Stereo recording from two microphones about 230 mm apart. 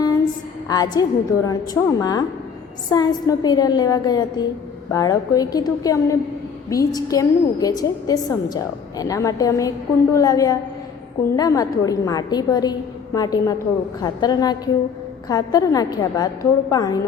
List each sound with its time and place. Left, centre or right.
0.7 s a woman's voice: centre